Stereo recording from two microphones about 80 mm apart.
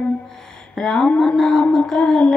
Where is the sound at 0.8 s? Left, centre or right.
Centre.